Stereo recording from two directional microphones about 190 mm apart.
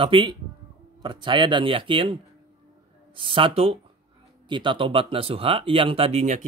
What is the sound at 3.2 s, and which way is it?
Speech, 25° right (ahead or behind).